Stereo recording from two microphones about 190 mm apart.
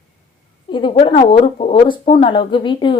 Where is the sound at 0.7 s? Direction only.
25° left (ahead or behind).